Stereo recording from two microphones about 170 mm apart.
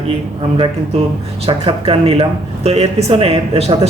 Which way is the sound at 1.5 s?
35° right (ahead or behind).